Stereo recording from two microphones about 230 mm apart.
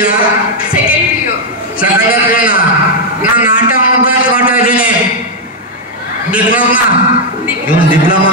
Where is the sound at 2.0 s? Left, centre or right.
Left.